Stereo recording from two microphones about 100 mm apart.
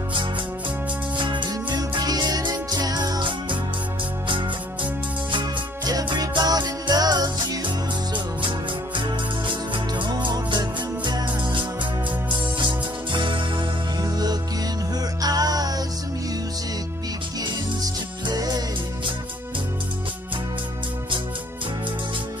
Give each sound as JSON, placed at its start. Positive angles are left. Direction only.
{"t": 1.1, "sound": "music", "side_deg": -55}
{"t": 6.0, "sound": "music", "side_deg": -45}
{"t": 9.9, "sound": "music", "side_deg": -50}
{"t": 15.2, "sound": "music", "side_deg": -40}
{"t": 18.2, "sound": "music", "side_deg": -40}